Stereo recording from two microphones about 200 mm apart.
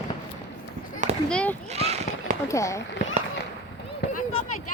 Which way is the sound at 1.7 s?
30° right (ahead or behind).